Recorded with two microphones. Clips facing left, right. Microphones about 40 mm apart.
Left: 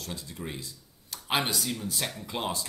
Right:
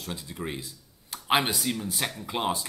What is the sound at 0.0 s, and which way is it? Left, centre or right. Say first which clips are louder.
Speech: right 3 dB; centre.